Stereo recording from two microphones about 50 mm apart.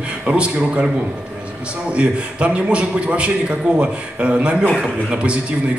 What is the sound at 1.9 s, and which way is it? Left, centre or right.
A man's voice, right.